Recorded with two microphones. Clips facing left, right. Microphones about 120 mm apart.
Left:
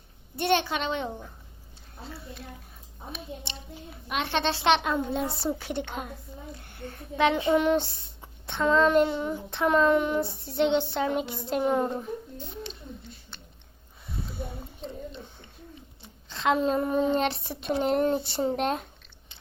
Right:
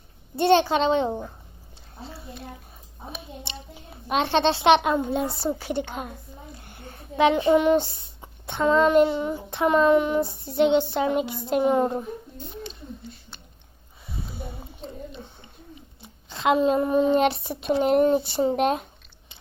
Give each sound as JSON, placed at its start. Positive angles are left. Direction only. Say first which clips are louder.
{"t": 0.3, "sound": "a child's voice", "louder": "right 7 dB", "side_deg": -30}
{"t": 3.8, "sound": "speech", "louder": "right 7 dB", "side_deg": -30}
{"t": 6.7, "sound": "child singing", "louder": "left 2 dB", "side_deg": -10}
{"t": 7.5, "sound": "speech", "louder": "right 4 dB", "side_deg": -5}
{"t": 11.8, "sound": "a woman's voice", "louder": "right 4 dB", "side_deg": -20}
{"t": 14.1, "sound": "a sound", "louder": "even", "side_deg": -10}
{"t": 16.0, "sound": "speech", "louder": "right 3 dB", "side_deg": -10}